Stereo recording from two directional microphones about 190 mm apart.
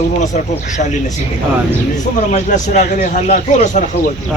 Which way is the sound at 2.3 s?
40° left (ahead or behind).